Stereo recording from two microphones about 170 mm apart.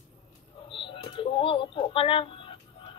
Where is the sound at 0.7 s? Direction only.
30° left (ahead or behind).